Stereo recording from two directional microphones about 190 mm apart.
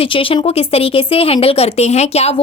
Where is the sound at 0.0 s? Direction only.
30° left (ahead or behind).